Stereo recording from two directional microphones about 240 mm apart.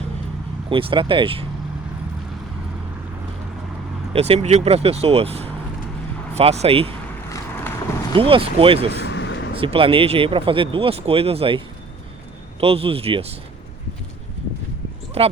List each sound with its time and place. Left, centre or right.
0.7 s speech: right
4.1 s speech: right
7.3 s vehicle: centre
8.1 s speech: right
9.0 s vehicle: left
9.6 s speech: right
15.2 s speech: right